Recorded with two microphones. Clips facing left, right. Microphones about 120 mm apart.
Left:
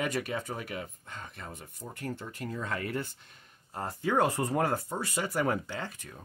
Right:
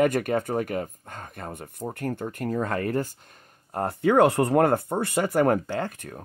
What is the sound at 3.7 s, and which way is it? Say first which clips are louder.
Speech: right 9 dB; 65° right (ahead or behind).